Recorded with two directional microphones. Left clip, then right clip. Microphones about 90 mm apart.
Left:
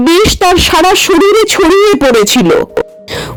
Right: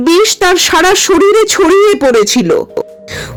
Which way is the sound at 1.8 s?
50° left (ahead or behind).